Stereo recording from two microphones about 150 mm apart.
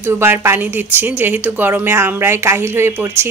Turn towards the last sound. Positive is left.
turn(degrees=-15)  # may be behind; listen again after turning